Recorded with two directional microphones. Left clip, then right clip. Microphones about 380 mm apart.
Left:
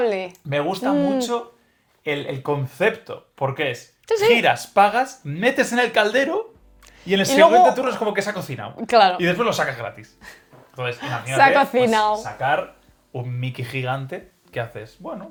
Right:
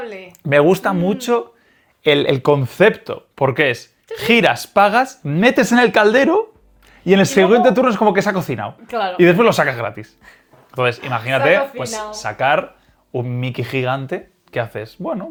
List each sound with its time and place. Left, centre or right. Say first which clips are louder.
0.0 s speech: left 9 dB; left
0.5 s speech: right 8 dB; right
8.9 s speech: left 7 dB; left
9.1 s speech: right 8 dB; right
10.8 s speech: right 8 dB; right
11.7 s speech: left 8 dB; left
13.1 s speech: right 8 dB; right